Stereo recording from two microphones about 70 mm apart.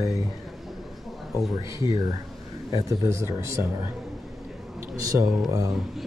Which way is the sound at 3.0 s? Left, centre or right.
Right.